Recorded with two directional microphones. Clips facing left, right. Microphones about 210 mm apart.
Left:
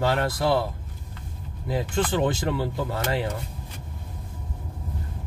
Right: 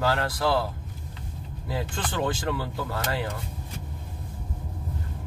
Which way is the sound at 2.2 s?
25° left (ahead or behind).